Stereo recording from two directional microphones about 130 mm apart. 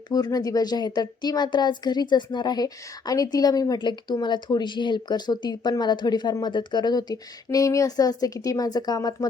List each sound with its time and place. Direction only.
0.1 s speech: 30° left (ahead or behind)